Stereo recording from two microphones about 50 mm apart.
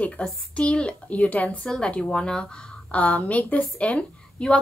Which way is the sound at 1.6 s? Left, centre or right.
Centre.